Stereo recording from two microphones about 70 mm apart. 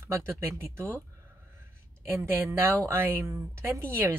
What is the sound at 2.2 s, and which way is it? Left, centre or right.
Speech, right.